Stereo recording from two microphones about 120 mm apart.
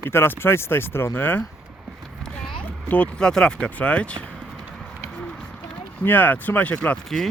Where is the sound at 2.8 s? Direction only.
10° left (ahead or behind).